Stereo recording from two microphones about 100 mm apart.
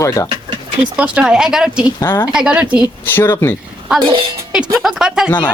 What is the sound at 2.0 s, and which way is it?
Speech, 25° left (ahead or behind).